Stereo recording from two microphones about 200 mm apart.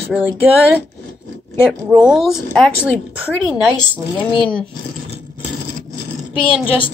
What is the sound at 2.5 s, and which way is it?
Speech, 5° left (ahead or behind).